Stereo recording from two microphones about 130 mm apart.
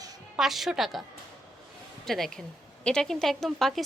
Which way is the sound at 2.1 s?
5° left (ahead or behind).